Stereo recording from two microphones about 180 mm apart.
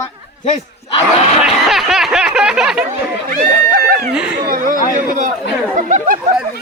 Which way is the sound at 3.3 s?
60° right (ahead or behind).